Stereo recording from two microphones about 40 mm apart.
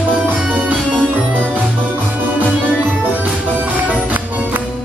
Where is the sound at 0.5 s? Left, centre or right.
Right.